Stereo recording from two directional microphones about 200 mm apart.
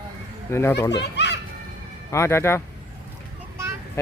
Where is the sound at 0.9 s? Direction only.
60° left (ahead or behind).